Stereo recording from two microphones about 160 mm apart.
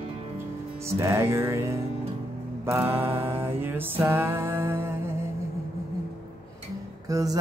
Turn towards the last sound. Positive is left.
turn(degrees=-20)  # may be behind; listen again after turning